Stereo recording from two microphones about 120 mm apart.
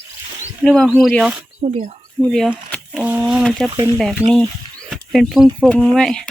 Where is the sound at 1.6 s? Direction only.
65° right (ahead or behind).